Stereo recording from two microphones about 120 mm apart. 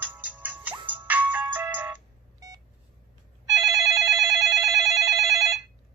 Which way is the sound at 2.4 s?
30° right (ahead or behind).